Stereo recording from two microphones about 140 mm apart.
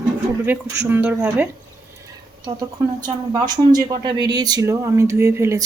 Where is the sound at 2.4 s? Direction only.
30° right (ahead or behind).